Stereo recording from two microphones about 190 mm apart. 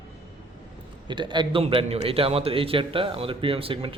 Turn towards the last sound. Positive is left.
turn(degrees=-30)  # may be behind; listen again after turning